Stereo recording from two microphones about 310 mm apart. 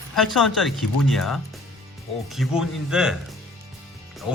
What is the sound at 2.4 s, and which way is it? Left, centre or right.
Speech, centre.